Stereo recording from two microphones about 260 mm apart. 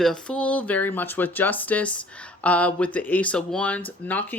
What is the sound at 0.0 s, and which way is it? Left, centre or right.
Speech, centre.